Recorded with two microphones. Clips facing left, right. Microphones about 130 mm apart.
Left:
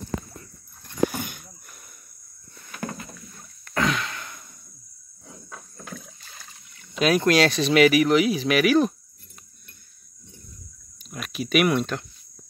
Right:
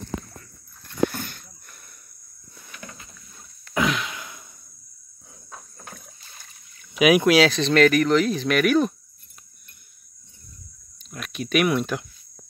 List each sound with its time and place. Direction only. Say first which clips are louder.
1.1 s a sound: left 2 dB; 10° left (ahead or behind)
2.7 s rowboat: left 10 dB; 50° left (ahead or behind)
3.7 s sigh: right 1 dB; 5° right (ahead or behind)
5.3 s rowboat: left 1 dB; 90° left
6.9 s speech: right 3 dB; 10° right (ahead or behind)
11.1 s speech: left 1 dB; centre (ahead or behind)